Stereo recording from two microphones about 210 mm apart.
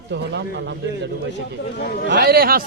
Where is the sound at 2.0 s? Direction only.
50° right (ahead or behind).